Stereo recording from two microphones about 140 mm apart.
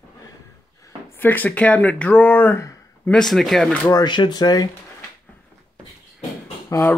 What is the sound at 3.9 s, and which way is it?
Speech, 30° left (ahead or behind).